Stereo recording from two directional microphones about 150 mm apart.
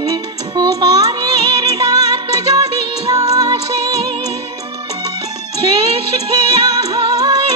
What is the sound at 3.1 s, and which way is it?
Music, 25° right (ahead or behind).